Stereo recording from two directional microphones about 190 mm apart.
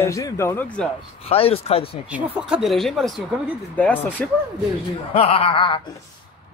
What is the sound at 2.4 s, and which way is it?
A man's voice, 5° right (ahead or behind).